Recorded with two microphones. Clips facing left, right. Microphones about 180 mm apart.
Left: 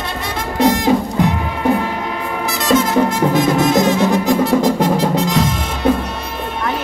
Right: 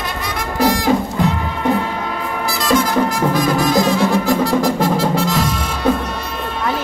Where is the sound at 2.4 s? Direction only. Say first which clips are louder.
Left 2 dB; 20° left (ahead or behind).